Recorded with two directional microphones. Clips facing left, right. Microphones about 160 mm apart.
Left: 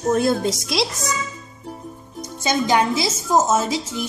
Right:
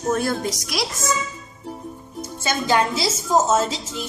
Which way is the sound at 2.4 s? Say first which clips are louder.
Left 2 dB; 15° left (ahead or behind).